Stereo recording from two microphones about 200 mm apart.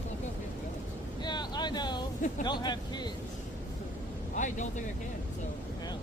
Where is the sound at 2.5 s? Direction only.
20° left (ahead or behind).